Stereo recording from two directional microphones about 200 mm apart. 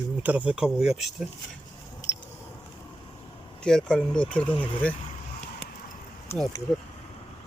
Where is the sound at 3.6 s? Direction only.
5° left (ahead or behind).